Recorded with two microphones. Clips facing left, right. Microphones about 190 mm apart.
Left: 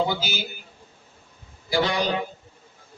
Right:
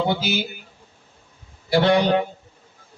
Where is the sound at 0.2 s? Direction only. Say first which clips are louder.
Right 7 dB; 60° right (ahead or behind).